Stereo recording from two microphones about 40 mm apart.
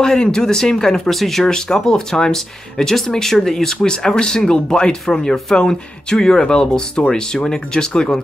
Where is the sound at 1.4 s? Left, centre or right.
Centre.